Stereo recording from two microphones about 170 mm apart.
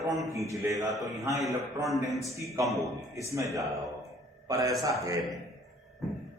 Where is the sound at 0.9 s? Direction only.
Centre (ahead or behind).